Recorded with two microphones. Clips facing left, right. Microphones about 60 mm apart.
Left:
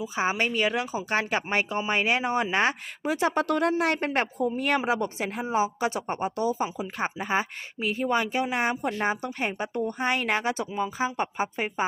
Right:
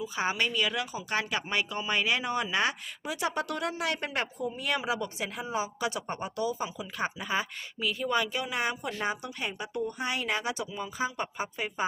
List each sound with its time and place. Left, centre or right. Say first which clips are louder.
0.0 s speech: left 3 dB; left